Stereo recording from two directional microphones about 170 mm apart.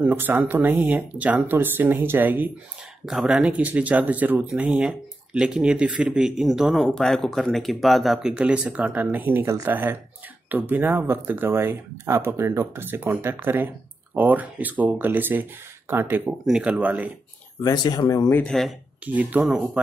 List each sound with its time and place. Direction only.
0.0 s speech: 10° right (ahead or behind)
17.6 s speech: 25° left (ahead or behind)
18.3 s speech: 5° left (ahead or behind)